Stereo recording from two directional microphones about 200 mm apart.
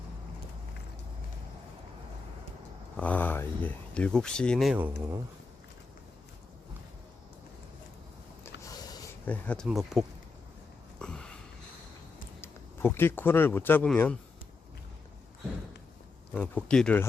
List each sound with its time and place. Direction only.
3.0 s speech: 10° left (ahead or behind); by 5.2 s 10° right (ahead or behind)
8.6 s a sound: 20° left (ahead or behind)
9.2 s speech: 5° left (ahead or behind)
11.0 s a sound: 5° left (ahead or behind)
12.4 s speech: 10° left (ahead or behind)
16.3 s speech: 5° left (ahead or behind)